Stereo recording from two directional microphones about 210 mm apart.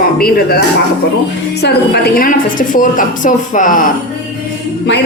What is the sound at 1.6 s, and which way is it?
A woman's voice, 45° left (ahead or behind).